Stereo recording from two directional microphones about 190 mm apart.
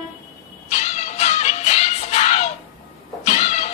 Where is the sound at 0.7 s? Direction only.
35° left (ahead or behind).